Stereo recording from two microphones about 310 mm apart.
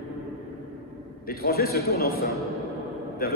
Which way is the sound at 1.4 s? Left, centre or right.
Left.